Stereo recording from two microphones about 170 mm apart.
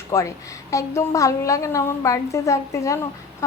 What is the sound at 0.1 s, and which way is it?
Speech, 20° left (ahead or behind).